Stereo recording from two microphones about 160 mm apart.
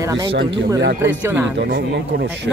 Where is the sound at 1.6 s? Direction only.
90° right.